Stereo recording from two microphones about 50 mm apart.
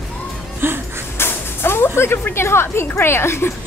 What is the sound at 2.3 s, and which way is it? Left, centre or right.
Speech, left.